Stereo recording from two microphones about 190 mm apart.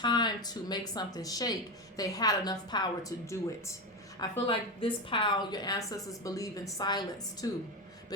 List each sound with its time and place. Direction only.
0.0 s a woman's voice: 25° left (ahead or behind)
4.2 s a woman's voice: 25° left (ahead or behind)